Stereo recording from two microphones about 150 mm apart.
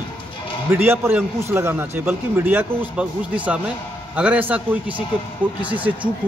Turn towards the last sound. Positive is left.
turn(degrees=-10)  # may be behind; listen again after turning